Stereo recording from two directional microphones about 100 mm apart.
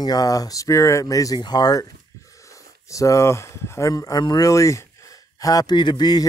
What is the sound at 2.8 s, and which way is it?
A man's voice, 30° left (ahead or behind).